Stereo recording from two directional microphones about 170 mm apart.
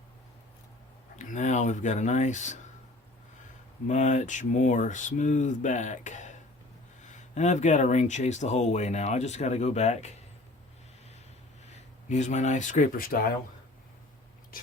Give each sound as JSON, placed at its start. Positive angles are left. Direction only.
{"t": 1.2, "sound": "speech", "side_deg": 45}
{"t": 3.8, "sound": "speech", "side_deg": 45}
{"t": 11.7, "sound": "speech", "side_deg": 45}